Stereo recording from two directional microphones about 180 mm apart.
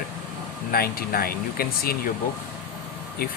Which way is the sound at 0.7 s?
55° left (ahead or behind).